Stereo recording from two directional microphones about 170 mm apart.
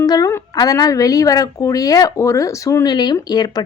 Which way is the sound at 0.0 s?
20° left (ahead or behind).